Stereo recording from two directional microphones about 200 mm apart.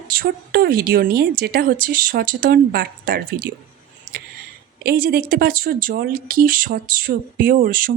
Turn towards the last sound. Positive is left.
turn(degrees=-45)  # may be behind; listen again after turning